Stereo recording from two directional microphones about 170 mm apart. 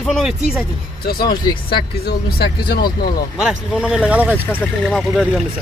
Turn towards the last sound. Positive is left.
turn(degrees=0)  # may be behind; listen again after turning